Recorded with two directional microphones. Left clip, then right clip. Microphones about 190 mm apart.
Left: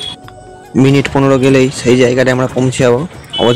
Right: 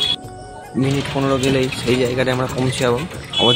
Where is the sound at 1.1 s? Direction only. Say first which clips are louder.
Left 7 dB; 40° left (ahead or behind).